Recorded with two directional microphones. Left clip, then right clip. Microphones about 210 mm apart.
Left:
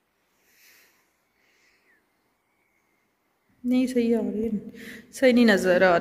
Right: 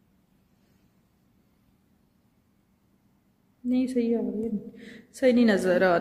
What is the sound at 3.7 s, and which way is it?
A woman's voice, centre (ahead or behind).